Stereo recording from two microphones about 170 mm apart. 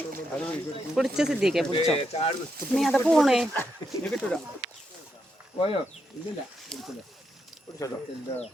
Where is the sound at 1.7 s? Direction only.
35° left (ahead or behind).